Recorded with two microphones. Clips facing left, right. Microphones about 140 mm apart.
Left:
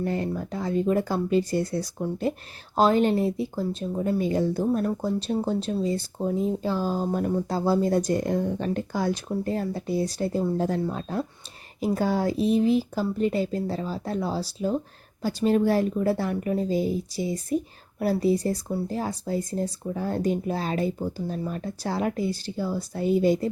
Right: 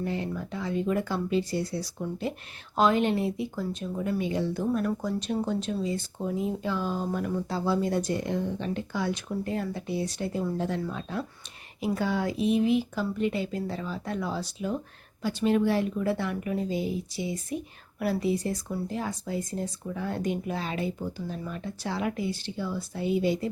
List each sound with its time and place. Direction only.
0.0 s speech: 45° left (ahead or behind)